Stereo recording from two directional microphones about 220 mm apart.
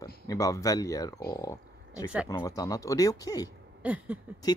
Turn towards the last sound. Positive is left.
turn(degrees=-5)  # may be behind; listen again after turning